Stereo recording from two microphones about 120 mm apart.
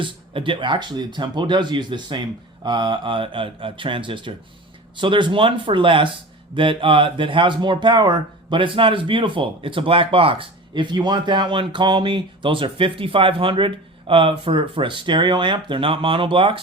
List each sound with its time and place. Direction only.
0.0 s speech: 45° right (ahead or behind)